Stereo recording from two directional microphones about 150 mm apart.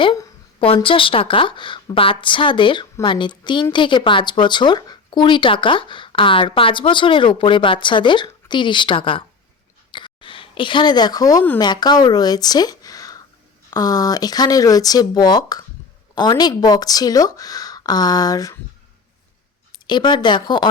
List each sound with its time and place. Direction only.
0.6 s a woman's voice: 35° left (ahead or behind)
9.9 s a sound: 35° left (ahead or behind)
11.6 s speech: 30° left (ahead or behind)
19.9 s a woman's voice: 30° left (ahead or behind)